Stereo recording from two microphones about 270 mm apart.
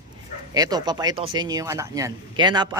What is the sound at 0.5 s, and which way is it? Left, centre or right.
Speech, centre.